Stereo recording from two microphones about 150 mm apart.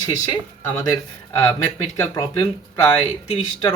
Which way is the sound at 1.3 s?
20° left (ahead or behind).